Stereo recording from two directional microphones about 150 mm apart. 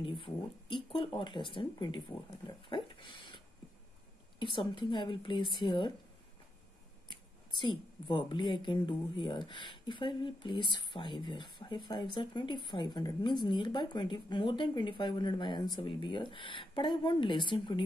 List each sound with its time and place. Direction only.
0.0 s a woman's voice: 35° left (ahead or behind)
7.6 s a woman's voice: 35° left (ahead or behind)